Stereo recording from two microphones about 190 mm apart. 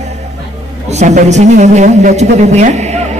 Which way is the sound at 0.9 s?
35° right (ahead or behind).